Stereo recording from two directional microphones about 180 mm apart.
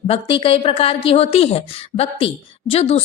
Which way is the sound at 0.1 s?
30° left (ahead or behind).